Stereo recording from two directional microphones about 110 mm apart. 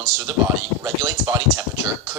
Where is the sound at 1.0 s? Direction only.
25° right (ahead or behind).